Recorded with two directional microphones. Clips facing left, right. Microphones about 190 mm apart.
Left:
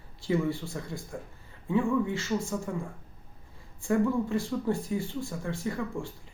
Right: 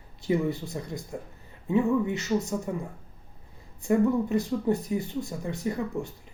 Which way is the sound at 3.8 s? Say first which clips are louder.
Right 3 dB; 20° right (ahead or behind).